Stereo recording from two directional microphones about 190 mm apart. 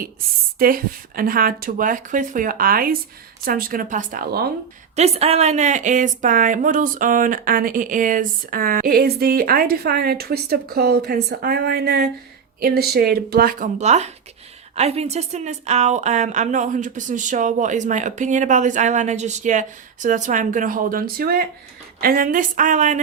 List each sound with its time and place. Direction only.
0.6 s a woman's voice: 50° right (ahead or behind)
4.9 s a woman's voice: 35° right (ahead or behind)